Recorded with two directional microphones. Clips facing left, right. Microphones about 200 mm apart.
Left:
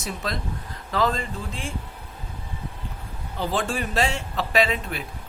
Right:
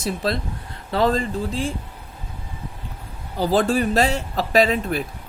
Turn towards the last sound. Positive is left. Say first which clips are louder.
# right 5 dB
turn(degrees=-40)  # may be behind; listen again after turning